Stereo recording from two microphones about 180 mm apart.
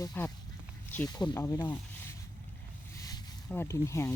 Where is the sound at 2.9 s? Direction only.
20° left (ahead or behind).